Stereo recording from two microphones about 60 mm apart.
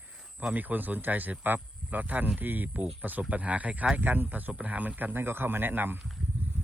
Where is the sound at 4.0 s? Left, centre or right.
Right.